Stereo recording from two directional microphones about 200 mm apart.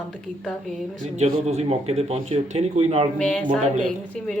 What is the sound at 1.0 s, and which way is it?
Speech, 35° right (ahead or behind).